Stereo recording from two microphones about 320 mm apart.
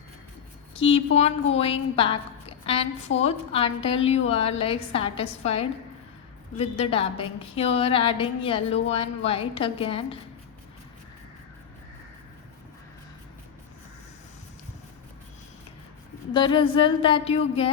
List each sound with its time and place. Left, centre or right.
0.8 s a woman's voice: centre
16.3 s a woman's voice: centre